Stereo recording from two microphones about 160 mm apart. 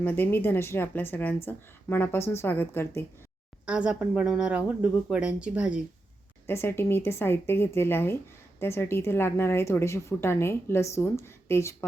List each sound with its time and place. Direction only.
0.0 s speech: 10° left (ahead or behind)
3.7 s speech: 5° right (ahead or behind)
6.5 s speech: 15° left (ahead or behind)